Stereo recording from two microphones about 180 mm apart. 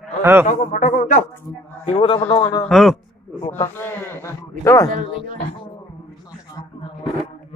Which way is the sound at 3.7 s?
10° left (ahead or behind).